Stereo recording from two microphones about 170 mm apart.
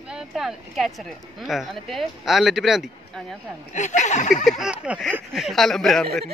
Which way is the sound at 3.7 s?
45° left (ahead or behind).